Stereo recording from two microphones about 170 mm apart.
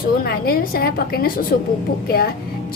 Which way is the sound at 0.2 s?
60° left (ahead or behind).